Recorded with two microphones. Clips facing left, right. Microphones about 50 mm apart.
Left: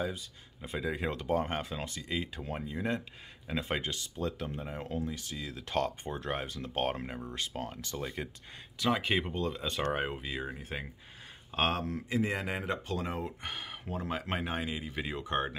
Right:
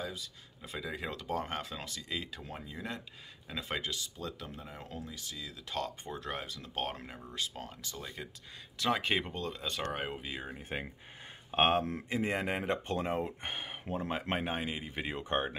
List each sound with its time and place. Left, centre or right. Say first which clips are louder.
0.0 s speech: left 5 dB; left
8.8 s speech: left 1 dB; centre
11.5 s speech: right 3 dB; right